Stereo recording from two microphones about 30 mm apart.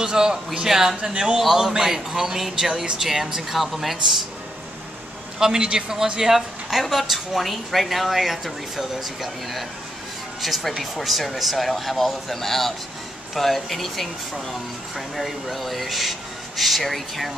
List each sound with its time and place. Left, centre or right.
0.0 s a man's voice: centre
1.1 s a man's voice: right; by 4.0 s centre
5.4 s speech: right
6.1 s speech: centre